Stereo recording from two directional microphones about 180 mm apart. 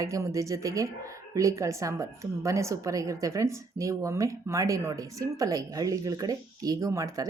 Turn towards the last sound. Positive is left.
turn(degrees=-20)  # may be behind; listen again after turning